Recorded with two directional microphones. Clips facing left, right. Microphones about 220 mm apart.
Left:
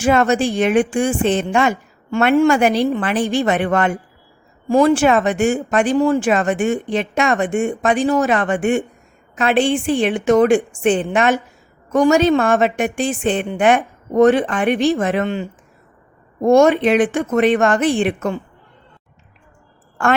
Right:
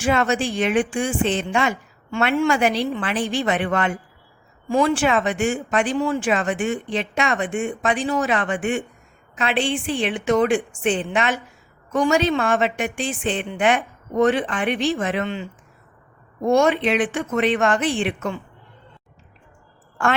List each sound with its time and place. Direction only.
0.0 s speech: 45° left (ahead or behind)